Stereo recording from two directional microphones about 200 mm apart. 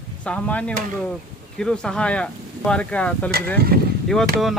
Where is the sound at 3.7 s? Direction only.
50° right (ahead or behind).